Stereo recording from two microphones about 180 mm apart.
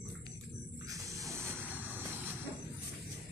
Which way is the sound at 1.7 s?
10° right (ahead or behind).